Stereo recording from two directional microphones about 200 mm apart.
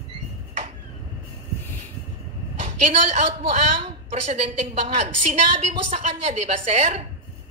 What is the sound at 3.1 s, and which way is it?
A man's voice, 25° right (ahead or behind).